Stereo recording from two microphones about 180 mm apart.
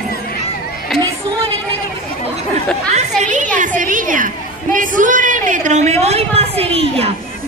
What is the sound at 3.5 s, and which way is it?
A man's voice, 45° right (ahead or behind).